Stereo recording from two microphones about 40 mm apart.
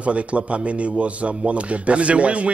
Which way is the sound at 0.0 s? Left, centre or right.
Right.